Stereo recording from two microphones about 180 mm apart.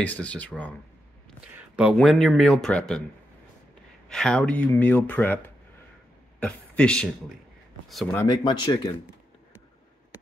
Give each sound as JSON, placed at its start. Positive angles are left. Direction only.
{"t": 0.0, "sound": "speech", "side_deg": 10}
{"t": 1.8, "sound": "speech", "side_deg": 0}
{"t": 4.1, "sound": "speech", "side_deg": 5}
{"t": 6.4, "sound": "speech", "side_deg": 5}
{"t": 8.3, "sound": "speech", "side_deg": 25}